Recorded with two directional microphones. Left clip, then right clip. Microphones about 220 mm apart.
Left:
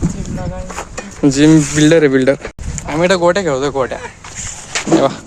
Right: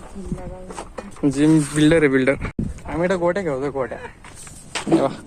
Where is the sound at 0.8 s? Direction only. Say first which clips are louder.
Left 8 dB; 10° left (ahead or behind).